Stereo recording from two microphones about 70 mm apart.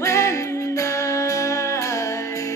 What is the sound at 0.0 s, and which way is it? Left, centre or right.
Music, left.